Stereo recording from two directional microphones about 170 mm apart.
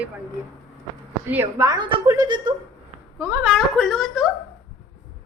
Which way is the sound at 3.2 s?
15° right (ahead or behind).